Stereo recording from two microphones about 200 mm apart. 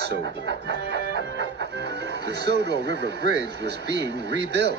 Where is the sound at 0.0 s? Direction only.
60° right (ahead or behind).